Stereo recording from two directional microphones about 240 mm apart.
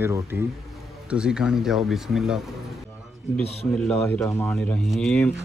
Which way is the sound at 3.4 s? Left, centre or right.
Left.